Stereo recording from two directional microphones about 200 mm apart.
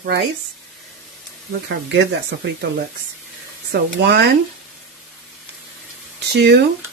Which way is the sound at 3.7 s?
55° right (ahead or behind).